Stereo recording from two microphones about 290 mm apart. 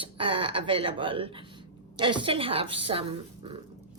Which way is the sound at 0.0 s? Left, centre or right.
Centre.